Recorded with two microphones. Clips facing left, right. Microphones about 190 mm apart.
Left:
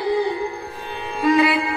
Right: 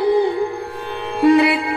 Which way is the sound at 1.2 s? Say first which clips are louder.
Right 4 dB; 60° right (ahead or behind).